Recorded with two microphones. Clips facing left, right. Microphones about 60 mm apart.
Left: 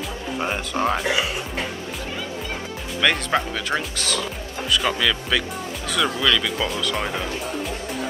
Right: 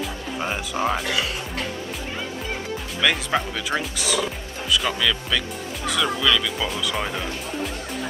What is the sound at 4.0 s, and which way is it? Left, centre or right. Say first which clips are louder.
Speech: right 2 dB; centre.